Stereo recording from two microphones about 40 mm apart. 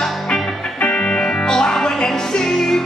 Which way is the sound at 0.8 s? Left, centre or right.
Centre.